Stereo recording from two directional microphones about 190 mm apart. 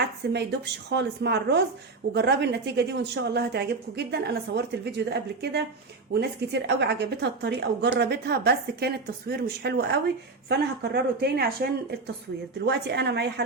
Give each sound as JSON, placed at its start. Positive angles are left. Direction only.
{"t": 0.2, "sound": "a woman's voice", "side_deg": -65}